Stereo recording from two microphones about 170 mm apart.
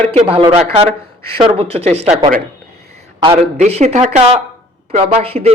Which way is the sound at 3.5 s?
40° right (ahead or behind).